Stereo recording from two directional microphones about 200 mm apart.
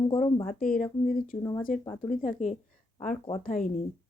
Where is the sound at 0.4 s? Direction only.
40° left (ahead or behind).